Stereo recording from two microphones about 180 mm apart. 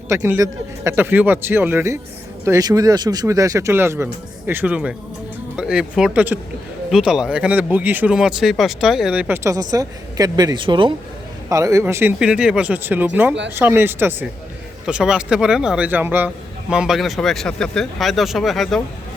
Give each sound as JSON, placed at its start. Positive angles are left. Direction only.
{"t": 0.1, "sound": "a man's voice", "side_deg": -15}